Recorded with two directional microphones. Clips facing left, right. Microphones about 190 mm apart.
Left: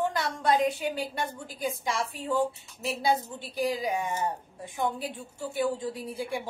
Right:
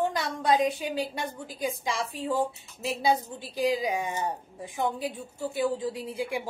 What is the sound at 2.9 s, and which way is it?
A woman's voice, 15° right (ahead or behind).